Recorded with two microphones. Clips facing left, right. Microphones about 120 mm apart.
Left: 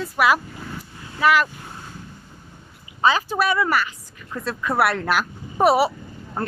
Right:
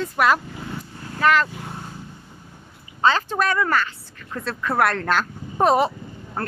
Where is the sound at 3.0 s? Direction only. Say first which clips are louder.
Even; 10° left (ahead or behind).